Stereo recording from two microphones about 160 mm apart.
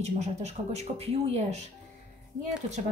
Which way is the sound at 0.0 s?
45° right (ahead or behind).